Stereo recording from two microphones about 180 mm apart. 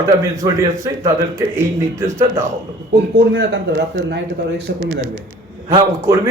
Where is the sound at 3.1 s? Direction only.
80° right.